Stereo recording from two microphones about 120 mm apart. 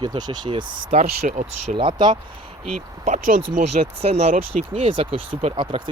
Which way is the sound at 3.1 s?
90° right.